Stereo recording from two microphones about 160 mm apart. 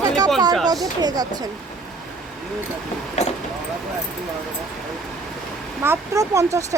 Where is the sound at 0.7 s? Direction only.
25° right (ahead or behind).